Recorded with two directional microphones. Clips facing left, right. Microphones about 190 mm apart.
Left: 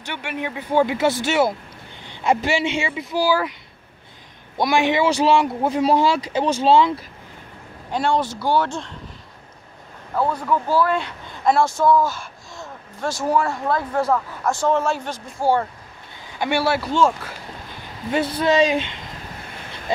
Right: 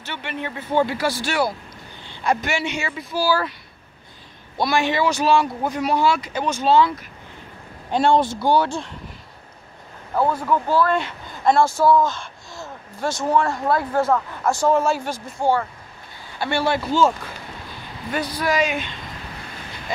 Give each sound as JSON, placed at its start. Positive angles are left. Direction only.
{"t": 0.0, "sound": "a man's voice", "side_deg": 10}
{"t": 4.6, "sound": "speech", "side_deg": 20}
{"t": 7.9, "sound": "speech", "side_deg": -25}
{"t": 10.1, "sound": "speech", "side_deg": -5}
{"t": 10.7, "sound": "speech", "side_deg": 10}
{"t": 12.0, "sound": "a man's voice", "side_deg": 5}
{"t": 16.3, "sound": "speech", "side_deg": 10}
{"t": 18.4, "sound": "speech", "side_deg": 30}